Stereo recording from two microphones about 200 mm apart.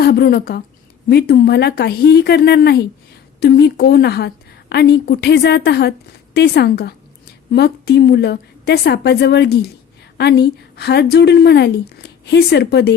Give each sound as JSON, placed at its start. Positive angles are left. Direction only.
{"t": 0.0, "sound": "a woman's voice", "side_deg": 50}